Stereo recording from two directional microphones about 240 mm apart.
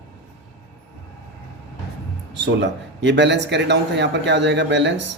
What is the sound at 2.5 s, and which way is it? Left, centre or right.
Speech, right.